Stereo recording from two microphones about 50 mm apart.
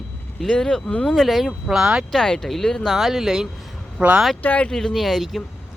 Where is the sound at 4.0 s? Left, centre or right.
Centre.